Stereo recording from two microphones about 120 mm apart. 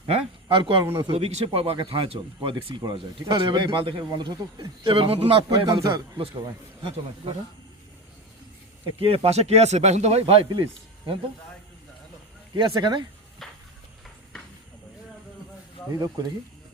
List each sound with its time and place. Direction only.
0.4 s speech: 40° right (ahead or behind)
0.9 s speech: 55° right (ahead or behind)
9.0 s speech: 55° right (ahead or behind)
10.5 s a man's voice: 45° right (ahead or behind)
12.5 s speech: 40° right (ahead or behind)
13.4 s a sound: centre (ahead or behind)